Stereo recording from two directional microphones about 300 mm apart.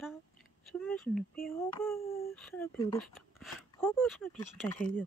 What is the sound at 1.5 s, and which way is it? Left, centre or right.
Child singing, centre.